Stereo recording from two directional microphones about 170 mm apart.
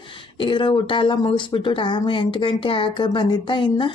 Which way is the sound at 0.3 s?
30° left (ahead or behind).